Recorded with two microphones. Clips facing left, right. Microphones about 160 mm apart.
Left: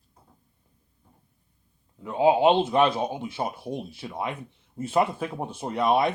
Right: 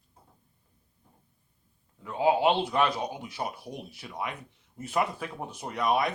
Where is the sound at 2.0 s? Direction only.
20° left (ahead or behind).